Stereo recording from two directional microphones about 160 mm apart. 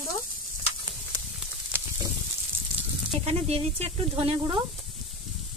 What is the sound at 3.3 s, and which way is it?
Speech, 40° right (ahead or behind).